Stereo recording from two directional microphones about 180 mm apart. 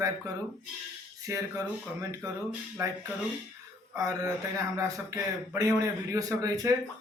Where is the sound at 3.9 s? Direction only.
20° right (ahead or behind).